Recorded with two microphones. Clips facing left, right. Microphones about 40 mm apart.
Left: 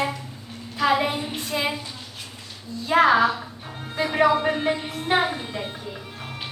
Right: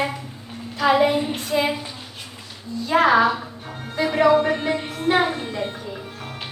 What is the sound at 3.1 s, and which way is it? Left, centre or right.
Speech, centre.